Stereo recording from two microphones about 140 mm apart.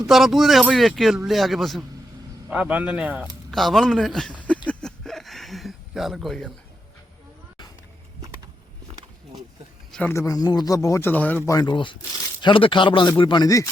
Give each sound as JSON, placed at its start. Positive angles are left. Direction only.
{"t": 0.1, "sound": "speech", "side_deg": 0}
{"t": 3.5, "sound": "speech", "side_deg": 0}
{"t": 4.7, "sound": "a sound", "side_deg": 5}
{"t": 10.1, "sound": "speech", "side_deg": 25}
{"t": 11.5, "sound": "speech", "side_deg": 30}